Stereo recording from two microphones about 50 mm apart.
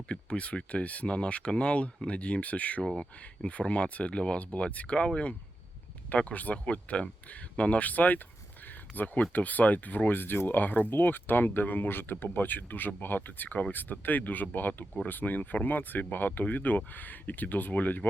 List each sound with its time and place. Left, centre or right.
0.1 s speech: left
2.8 s speech: centre; by 18.1 s left